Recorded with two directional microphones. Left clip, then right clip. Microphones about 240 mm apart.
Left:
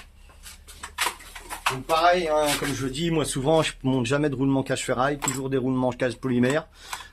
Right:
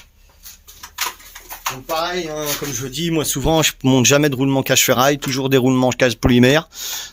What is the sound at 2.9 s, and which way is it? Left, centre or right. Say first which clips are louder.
Speech: right 9 dB; right.